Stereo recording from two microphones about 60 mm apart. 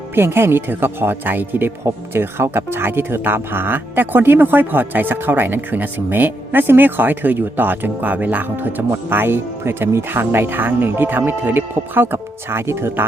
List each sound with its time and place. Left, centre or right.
0.1 s speech: right
8.9 s speech: right